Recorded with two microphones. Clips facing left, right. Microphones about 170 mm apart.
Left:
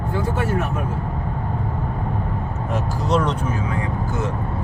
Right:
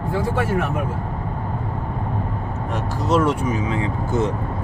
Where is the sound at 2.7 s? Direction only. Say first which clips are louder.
Right 1 dB; centre (ahead or behind); by 3.9 s 20° right (ahead or behind).